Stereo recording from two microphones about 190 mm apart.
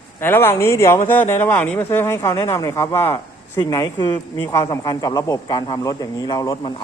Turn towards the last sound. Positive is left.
turn(degrees=20)  # may be behind; listen again after turning